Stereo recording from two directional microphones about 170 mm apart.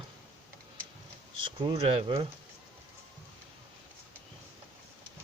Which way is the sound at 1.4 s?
30° right (ahead or behind).